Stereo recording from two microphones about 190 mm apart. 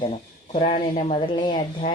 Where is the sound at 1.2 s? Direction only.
25° left (ahead or behind).